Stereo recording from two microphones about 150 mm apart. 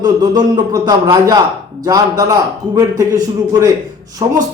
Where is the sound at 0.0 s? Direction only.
25° right (ahead or behind).